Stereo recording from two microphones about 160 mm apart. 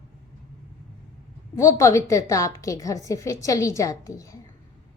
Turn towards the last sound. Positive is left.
turn(degrees=20)  # may be behind; listen again after turning